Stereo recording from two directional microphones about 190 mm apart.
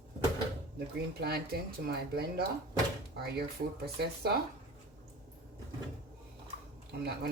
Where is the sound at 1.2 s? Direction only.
55° right (ahead or behind).